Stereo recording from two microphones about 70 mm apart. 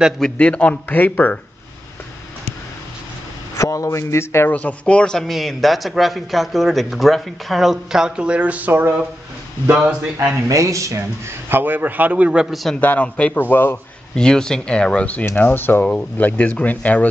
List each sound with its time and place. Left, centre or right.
0.4 s speech: centre
3.5 s speech: left
4.5 s speech: left
5.2 s a man's voice: centre
10.5 s a man's voice: right; by 12.5 s centre
12.8 s speech: left
13.4 s speech: left
14.1 s speech: centre; by 15.8 s left
15.8 s speech: centre